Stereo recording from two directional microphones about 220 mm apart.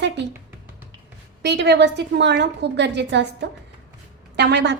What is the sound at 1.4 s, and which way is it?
A woman's voice, 50° right (ahead or behind).